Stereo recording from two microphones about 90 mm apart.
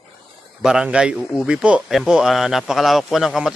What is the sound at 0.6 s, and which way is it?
A man's voice, 10° right (ahead or behind).